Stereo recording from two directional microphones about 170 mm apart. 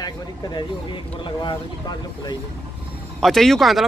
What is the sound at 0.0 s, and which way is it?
Speech, 25° left (ahead or behind).